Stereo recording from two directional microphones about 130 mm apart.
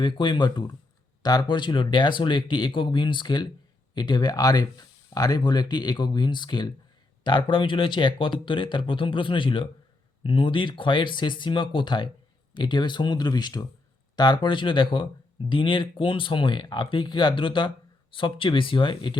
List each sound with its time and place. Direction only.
0.0 s speech: 40° left (ahead or behind)